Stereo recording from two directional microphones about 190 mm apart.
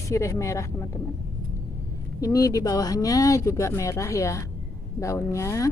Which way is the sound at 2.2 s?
20° left (ahead or behind).